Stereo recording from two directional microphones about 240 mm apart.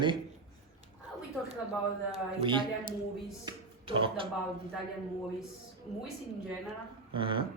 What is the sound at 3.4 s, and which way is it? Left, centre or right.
Speech, right.